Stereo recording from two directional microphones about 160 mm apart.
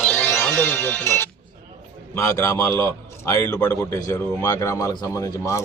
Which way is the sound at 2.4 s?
15° left (ahead or behind).